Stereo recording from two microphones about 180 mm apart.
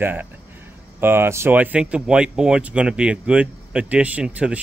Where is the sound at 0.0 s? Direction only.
10° right (ahead or behind).